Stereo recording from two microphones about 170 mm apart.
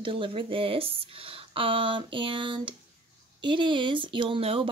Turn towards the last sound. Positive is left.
turn(degrees=-35)  # may be behind; listen again after turning